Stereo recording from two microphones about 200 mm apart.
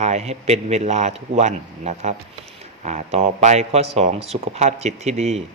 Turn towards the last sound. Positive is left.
turn(degrees=-35)  # may be behind; listen again after turning